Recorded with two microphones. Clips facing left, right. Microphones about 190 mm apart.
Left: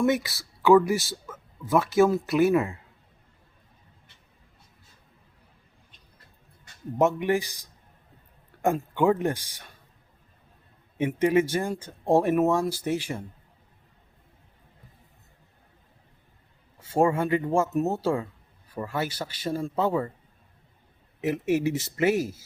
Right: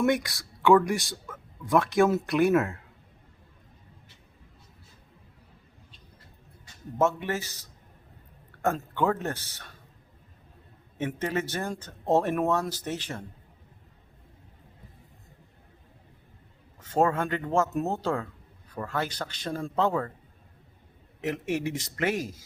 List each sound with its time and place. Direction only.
0.0 s speech: 5° left (ahead or behind)
7.0 s speech: 15° left (ahead or behind)
10.9 s speech: 15° left (ahead or behind)
16.8 s speech: 10° left (ahead or behind)
21.2 s speech: 5° left (ahead or behind)